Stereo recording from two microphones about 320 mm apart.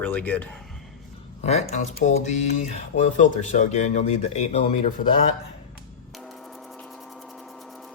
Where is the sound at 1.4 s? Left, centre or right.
Left.